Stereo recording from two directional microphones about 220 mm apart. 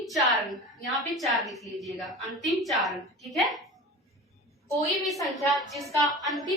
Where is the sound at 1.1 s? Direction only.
Centre (ahead or behind).